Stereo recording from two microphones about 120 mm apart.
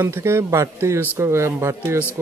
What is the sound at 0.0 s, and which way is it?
Speech, 20° right (ahead or behind).